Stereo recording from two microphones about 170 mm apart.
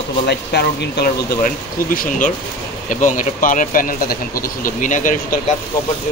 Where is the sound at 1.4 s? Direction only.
50° left (ahead or behind).